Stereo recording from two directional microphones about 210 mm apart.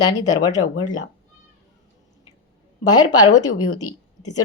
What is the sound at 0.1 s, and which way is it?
Speech, 15° left (ahead or behind).